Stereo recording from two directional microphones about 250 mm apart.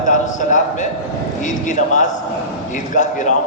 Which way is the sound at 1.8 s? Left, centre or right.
Left.